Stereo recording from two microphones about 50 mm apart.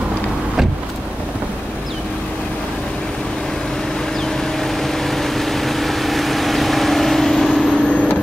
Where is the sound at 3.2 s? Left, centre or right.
Centre.